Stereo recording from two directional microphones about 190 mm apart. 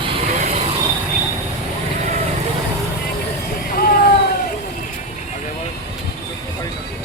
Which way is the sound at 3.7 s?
50° left (ahead or behind).